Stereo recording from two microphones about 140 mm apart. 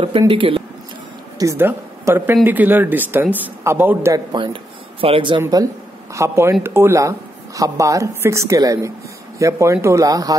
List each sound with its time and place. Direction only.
0.3 s speech: 40° right (ahead or behind)
1.4 s speech: 20° right (ahead or behind)
4.1 s speech: 35° right (ahead or behind)
5.4 s speech: 25° right (ahead or behind)